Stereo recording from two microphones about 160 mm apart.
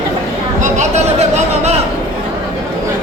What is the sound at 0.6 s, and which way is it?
Chatter, 45° right (ahead or behind).